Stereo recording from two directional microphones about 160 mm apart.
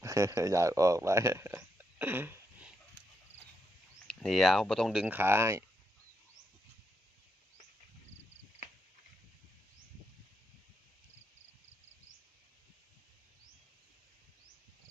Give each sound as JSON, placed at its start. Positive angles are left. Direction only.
{"t": 0.0, "sound": "speech", "side_deg": -20}
{"t": 4.0, "sound": "speech", "side_deg": 5}